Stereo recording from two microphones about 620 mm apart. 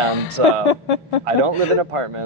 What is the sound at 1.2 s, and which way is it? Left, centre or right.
Speech, right.